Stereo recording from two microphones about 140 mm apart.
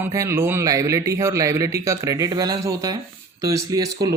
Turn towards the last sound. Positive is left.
turn(degrees=-25)  # may be behind; listen again after turning